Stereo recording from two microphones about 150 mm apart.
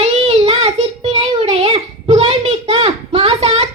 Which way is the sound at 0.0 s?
45° right (ahead or behind).